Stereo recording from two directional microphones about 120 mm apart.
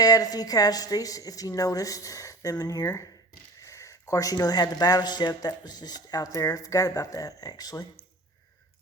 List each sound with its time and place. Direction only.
0.0 s a woman's voice: 30° left (ahead or behind)